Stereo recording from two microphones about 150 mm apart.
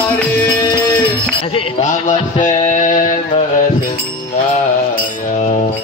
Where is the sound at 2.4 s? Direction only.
55° left (ahead or behind).